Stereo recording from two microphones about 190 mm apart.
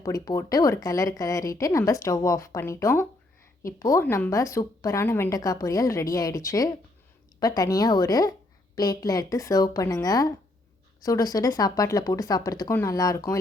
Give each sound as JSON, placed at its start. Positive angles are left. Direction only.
{"t": 0.0, "sound": "a woman's voice", "side_deg": 20}